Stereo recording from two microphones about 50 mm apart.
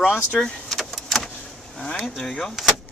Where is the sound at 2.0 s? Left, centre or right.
Centre.